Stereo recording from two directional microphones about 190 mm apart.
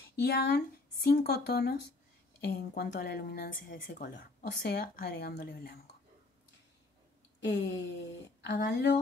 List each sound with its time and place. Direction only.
0.1 s speech: 55° left (ahead or behind)
7.3 s a sound: 70° left (ahead or behind)
8.4 s speech: 65° left (ahead or behind)